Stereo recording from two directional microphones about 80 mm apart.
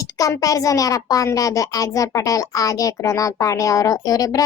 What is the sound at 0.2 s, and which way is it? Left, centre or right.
A child's voice, left.